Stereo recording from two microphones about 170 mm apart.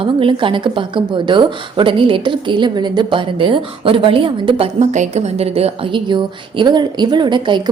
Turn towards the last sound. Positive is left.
turn(degrees=-25)  # may be behind; listen again after turning